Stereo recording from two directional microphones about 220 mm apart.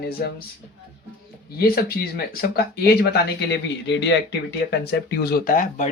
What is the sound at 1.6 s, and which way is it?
Speech, 45° left (ahead or behind).